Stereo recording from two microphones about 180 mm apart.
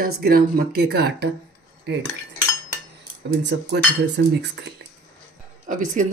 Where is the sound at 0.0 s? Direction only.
55° right (ahead or behind).